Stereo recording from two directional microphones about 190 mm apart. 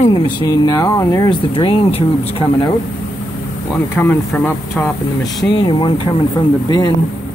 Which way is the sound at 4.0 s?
10° left (ahead or behind).